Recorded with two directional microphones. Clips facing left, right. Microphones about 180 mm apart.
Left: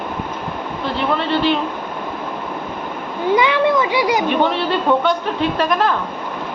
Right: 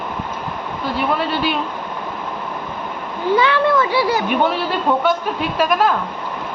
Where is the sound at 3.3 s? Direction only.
15° left (ahead or behind).